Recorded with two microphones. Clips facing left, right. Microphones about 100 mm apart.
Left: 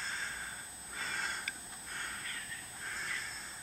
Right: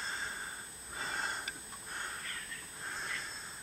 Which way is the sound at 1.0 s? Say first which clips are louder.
Right 2 dB; 20° right (ahead or behind).